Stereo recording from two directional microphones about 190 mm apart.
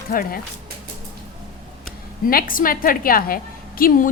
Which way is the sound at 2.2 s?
45° left (ahead or behind).